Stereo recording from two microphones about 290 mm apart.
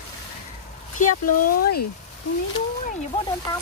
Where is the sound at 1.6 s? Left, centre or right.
Left.